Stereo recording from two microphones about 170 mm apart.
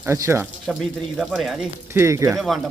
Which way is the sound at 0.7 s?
5° right (ahead or behind).